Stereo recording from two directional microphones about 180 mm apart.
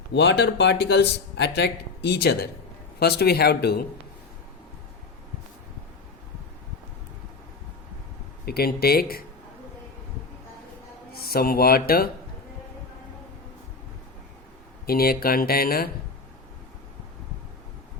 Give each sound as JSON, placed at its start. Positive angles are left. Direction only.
{"t": 0.1, "sound": "a man's voice", "side_deg": 70}
{"t": 8.4, "sound": "speech", "side_deg": 60}
{"t": 11.1, "sound": "speech", "side_deg": 60}
{"t": 14.8, "sound": "speech", "side_deg": 55}